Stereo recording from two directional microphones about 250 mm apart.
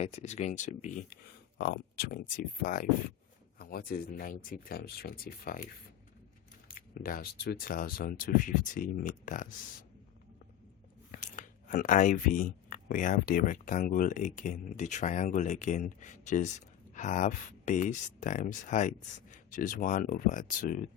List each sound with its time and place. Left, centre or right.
0.0 s speech: left
11.1 s speech: left